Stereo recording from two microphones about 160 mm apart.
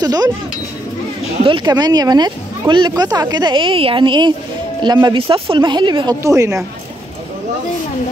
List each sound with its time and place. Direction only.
0.0 s speech: 25° right (ahead or behind)
1.4 s speech: 30° right (ahead or behind)